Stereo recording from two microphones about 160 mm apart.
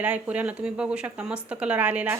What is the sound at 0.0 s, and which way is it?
Speech, 10° right (ahead or behind).